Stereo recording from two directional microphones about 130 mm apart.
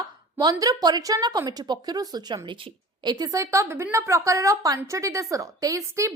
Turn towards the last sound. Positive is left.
turn(degrees=-25)  # may be behind; listen again after turning